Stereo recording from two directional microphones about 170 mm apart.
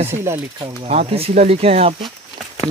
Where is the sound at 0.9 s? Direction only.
35° right (ahead or behind).